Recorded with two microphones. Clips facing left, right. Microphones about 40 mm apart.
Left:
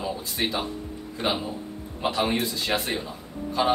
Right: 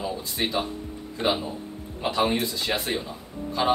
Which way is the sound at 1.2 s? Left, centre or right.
Centre.